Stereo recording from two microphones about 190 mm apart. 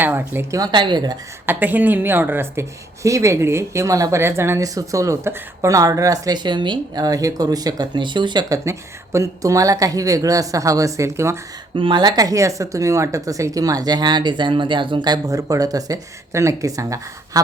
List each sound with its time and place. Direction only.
0.0 s speech: 10° right (ahead or behind)
1.5 s speech: 10° right (ahead or behind)
11.8 s speech: 25° right (ahead or behind)